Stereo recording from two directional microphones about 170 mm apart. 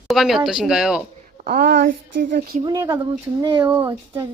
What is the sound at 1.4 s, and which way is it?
Speech, 55° right (ahead or behind).